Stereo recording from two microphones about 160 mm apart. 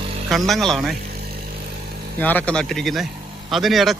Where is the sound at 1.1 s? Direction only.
75° right (ahead or behind).